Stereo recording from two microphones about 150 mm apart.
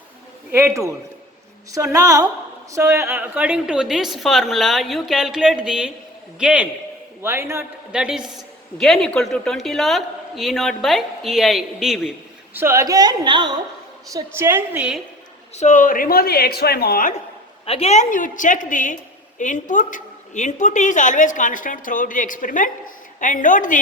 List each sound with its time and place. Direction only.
0.5 s a woman's voice: 20° right (ahead or behind)
7.9 s a woman's voice: 5° right (ahead or behind)
8.2 s a woman's voice: 25° right (ahead or behind)
8.8 s a woman's voice: 5° left (ahead or behind)
12.5 s a woman's voice: 20° right (ahead or behind)
14.1 s a woman's voice: 20° right (ahead or behind)
15.5 s a woman's voice: 55° left (ahead or behind); by 17.2 s 70° left (ahead or behind)
17.7 s speech: 45° left (ahead or behind); by 23.8 s 60° left (ahead or behind)